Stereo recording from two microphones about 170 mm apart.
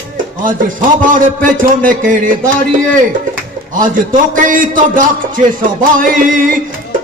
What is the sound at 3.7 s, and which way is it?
Speech, 50° right (ahead or behind).